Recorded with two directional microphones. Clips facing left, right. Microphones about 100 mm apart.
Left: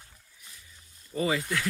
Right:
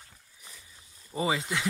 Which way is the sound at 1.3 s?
20° right (ahead or behind).